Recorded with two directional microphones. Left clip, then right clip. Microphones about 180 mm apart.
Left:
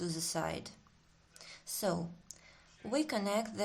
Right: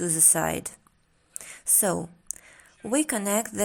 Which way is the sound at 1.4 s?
35° right (ahead or behind).